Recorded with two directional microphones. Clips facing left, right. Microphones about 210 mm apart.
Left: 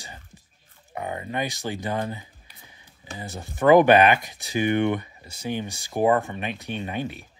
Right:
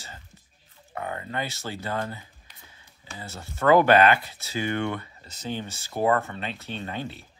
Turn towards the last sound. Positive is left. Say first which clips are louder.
# left 4 dB
turn(degrees=15)  # may be behind; listen again after turning